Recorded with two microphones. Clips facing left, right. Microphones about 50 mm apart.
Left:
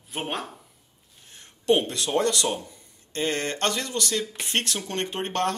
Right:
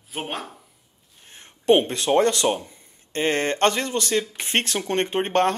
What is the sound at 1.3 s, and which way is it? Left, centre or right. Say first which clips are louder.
Speech: right 4 dB; right.